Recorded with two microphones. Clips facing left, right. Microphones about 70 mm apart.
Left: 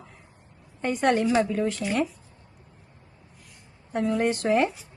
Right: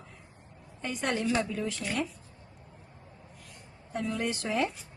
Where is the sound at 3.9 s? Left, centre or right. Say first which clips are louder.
Left 8 dB; left.